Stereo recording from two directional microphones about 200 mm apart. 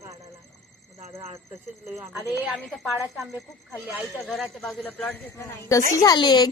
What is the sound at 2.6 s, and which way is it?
A woman's voice, centre (ahead or behind).